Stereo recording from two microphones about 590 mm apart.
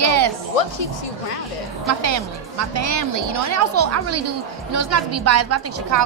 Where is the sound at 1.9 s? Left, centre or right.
Right.